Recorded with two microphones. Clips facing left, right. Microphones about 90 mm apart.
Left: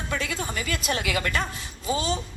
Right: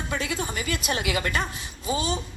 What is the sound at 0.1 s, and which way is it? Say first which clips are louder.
A woman's voice: even; 25° right (ahead or behind).